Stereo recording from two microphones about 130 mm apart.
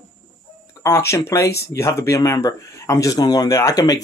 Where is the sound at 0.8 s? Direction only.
20° left (ahead or behind).